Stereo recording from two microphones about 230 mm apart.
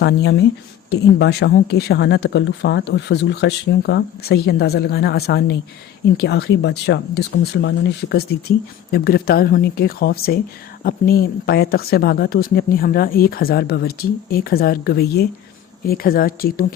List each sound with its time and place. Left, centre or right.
0.0 s a woman's voice: left